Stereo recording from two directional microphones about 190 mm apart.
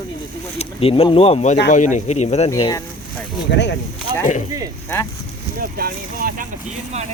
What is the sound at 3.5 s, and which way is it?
Speech, 65° left (ahead or behind).